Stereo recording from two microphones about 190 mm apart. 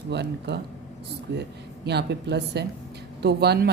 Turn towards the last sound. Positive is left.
turn(degrees=-60)  # may be behind; listen again after turning